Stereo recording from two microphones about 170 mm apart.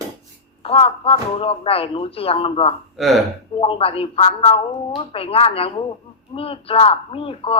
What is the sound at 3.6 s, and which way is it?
Speech, 35° left (ahead or behind).